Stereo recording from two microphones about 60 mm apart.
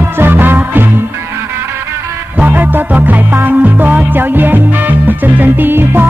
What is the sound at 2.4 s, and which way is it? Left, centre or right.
Music, right.